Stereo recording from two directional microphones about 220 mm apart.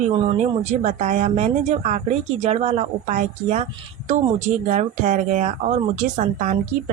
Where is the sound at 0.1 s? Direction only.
30° right (ahead or behind).